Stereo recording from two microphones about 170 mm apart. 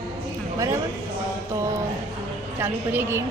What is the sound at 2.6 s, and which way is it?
Speech, 15° right (ahead or behind).